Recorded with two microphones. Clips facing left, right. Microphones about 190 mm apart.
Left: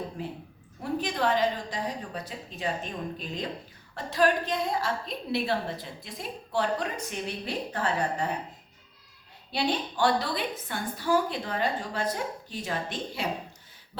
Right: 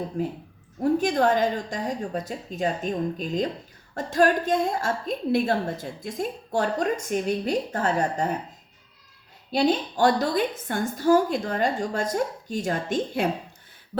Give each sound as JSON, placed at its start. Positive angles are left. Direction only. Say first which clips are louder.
{"t": 0.2, "sound": "a woman's voice", "louder": "right 8 dB", "side_deg": -45}
{"t": 9.5, "sound": "a woman's voice", "louder": "right 7 dB", "side_deg": -45}